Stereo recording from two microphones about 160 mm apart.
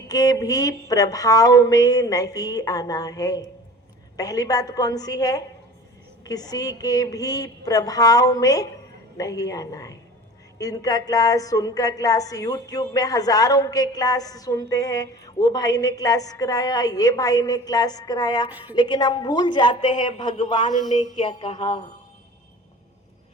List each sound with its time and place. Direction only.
0.1 s a woman's voice: 25° left (ahead or behind)